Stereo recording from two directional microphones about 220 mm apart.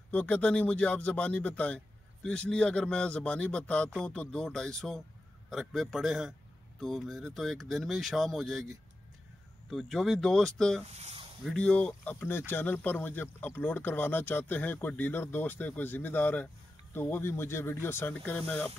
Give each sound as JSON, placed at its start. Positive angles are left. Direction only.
{"t": 0.1, "sound": "a man's voice", "side_deg": 5}
{"t": 10.9, "sound": "speech", "side_deg": -30}
{"t": 11.4, "sound": "speech", "side_deg": 5}